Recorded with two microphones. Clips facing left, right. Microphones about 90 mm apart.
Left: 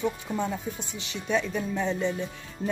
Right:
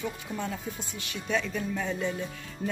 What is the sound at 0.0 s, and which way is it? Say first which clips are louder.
Speech: left 5 dB; 25° left (ahead or behind).